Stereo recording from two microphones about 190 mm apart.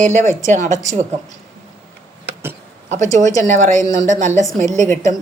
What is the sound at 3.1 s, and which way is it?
Speech, 40° right (ahead or behind).